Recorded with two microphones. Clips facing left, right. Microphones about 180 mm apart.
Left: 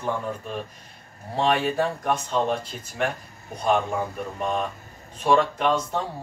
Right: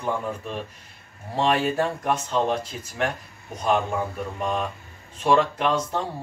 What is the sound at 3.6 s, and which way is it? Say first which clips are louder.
A man's voice: even; centre (ahead or behind).